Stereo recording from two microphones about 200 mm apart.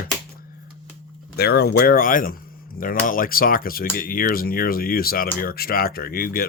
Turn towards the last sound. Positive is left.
turn(degrees=50)  # may be behind; listen again after turning